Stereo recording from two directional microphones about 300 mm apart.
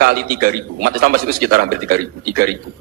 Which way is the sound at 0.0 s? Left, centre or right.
Right.